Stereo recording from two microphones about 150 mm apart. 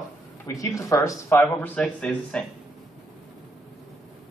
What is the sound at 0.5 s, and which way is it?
Speech, 20° left (ahead or behind).